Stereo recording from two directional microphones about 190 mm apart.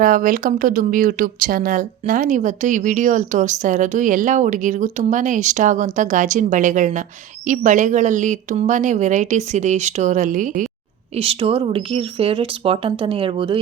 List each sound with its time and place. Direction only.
0.0 s speech: 45° right (ahead or behind)
11.1 s speech: 30° right (ahead or behind)